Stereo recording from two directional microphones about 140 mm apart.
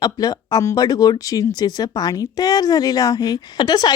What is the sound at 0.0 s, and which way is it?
Speech, 30° left (ahead or behind).